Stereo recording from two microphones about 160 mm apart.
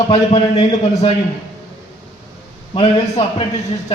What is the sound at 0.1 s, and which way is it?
A man's voice, 40° left (ahead or behind).